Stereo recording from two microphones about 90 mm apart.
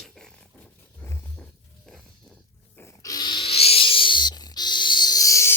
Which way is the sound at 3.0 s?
45° left (ahead or behind).